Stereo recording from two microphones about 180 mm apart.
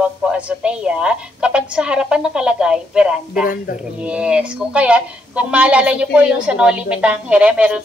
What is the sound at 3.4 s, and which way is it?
Speech, 50° left (ahead or behind).